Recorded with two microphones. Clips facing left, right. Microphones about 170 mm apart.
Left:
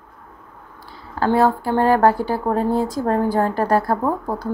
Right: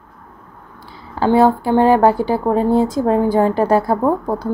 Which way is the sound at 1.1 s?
25° right (ahead or behind).